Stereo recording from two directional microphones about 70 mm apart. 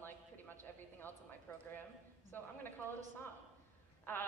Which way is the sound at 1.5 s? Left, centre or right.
Left.